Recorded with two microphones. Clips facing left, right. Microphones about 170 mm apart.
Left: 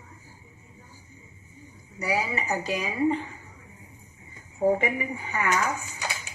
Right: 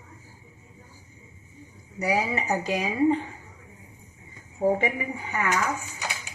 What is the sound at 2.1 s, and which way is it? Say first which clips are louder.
Speech: right 2 dB; 55° right (ahead or behind).